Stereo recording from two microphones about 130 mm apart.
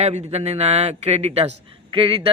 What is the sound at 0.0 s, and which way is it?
A man's voice, 60° right (ahead or behind).